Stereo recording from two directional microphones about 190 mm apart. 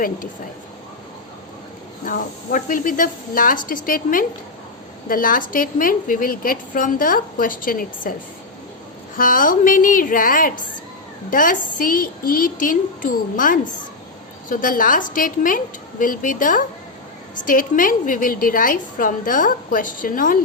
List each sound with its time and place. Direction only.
2.0 s a woman's voice: 45° left (ahead or behind)
9.1 s a woman's voice: 45° left (ahead or behind)